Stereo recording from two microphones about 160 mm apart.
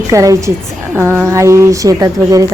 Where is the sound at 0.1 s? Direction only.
20° right (ahead or behind).